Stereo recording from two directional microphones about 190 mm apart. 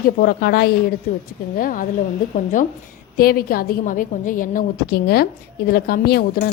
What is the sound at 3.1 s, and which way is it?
A woman's voice, 50° left (ahead or behind).